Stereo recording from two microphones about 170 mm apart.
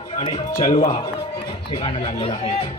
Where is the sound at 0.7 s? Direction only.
35° left (ahead or behind).